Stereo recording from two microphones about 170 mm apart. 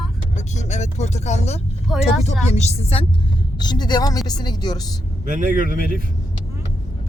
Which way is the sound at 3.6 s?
25° left (ahead or behind).